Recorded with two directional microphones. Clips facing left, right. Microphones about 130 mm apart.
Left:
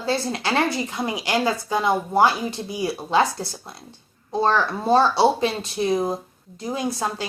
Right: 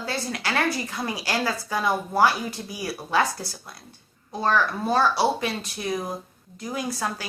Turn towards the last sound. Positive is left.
turn(degrees=25)  # may be behind; listen again after turning